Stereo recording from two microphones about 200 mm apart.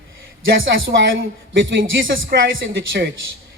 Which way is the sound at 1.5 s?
70° right (ahead or behind).